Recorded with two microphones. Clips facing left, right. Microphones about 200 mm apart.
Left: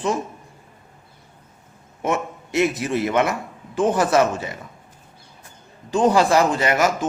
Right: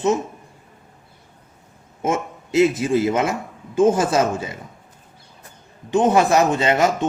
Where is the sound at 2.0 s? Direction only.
25° right (ahead or behind).